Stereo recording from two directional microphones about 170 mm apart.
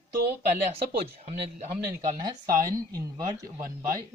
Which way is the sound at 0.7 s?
40° right (ahead or behind).